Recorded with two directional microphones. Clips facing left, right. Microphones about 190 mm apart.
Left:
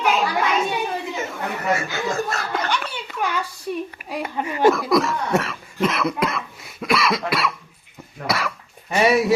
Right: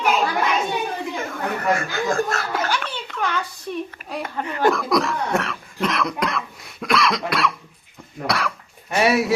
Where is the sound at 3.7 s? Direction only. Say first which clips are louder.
Left 1 dB; 5° left (ahead or behind).